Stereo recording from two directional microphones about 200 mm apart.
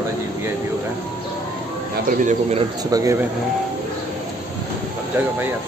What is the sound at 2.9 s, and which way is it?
Speech, 15° right (ahead or behind).